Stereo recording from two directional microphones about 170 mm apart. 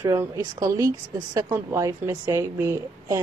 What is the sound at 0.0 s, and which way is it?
Speech, 20° right (ahead or behind).